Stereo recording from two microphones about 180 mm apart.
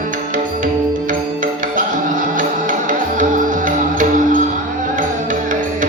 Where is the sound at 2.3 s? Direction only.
45° right (ahead or behind).